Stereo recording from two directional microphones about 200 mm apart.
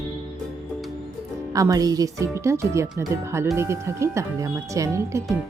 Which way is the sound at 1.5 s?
15° right (ahead or behind).